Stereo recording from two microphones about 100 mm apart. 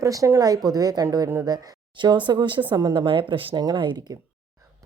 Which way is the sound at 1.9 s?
50° right (ahead or behind).